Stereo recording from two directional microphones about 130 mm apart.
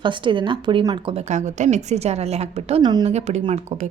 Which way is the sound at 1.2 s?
65° right (ahead or behind).